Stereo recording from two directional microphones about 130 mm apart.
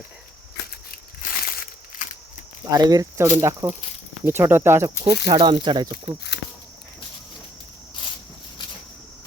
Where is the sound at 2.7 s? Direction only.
30° right (ahead or behind).